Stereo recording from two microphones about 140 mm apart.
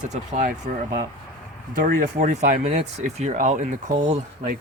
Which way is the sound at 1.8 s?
70° right (ahead or behind).